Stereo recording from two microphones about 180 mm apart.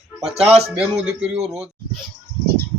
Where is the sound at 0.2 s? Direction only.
35° right (ahead or behind).